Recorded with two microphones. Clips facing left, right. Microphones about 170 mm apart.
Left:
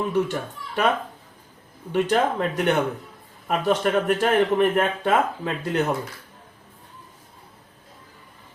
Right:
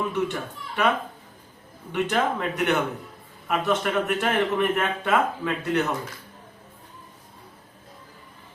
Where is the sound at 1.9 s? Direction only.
35° left (ahead or behind).